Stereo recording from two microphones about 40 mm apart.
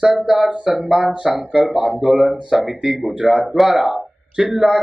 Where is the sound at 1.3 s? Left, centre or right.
Right.